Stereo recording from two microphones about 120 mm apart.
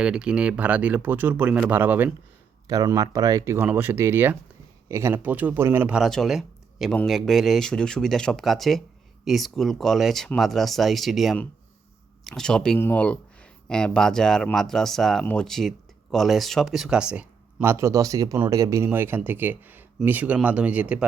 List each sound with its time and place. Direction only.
0.0 s speech: 5° right (ahead or behind)
2.6 s speech: 30° right (ahead or behind)
5.9 s speech: centre (ahead or behind)
17.6 s speech: 20° right (ahead or behind)